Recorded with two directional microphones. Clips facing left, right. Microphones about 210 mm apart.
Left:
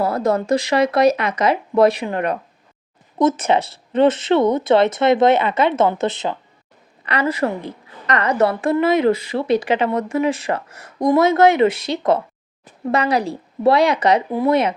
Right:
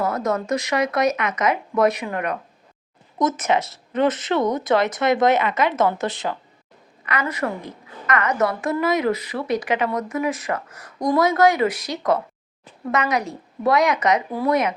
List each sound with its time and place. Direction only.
0.0 s a woman's voice: 30° left (ahead or behind)